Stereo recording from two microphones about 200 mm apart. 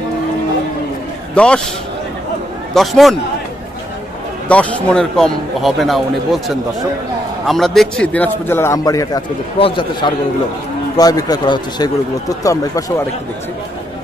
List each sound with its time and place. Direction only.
1.3 s a man's voice: 5° left (ahead or behind)
2.7 s a man's voice: centre (ahead or behind)
4.5 s a man's voice: 5° left (ahead or behind)